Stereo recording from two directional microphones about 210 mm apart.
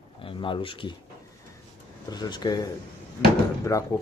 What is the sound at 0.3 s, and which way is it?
Speech, 25° left (ahead or behind).